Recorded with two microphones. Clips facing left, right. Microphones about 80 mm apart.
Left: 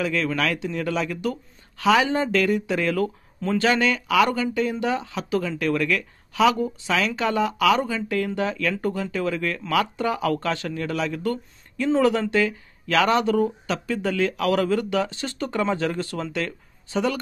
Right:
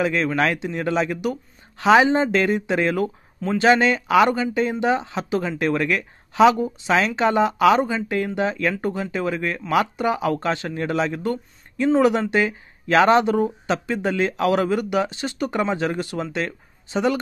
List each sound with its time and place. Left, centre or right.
0.0 s speech: right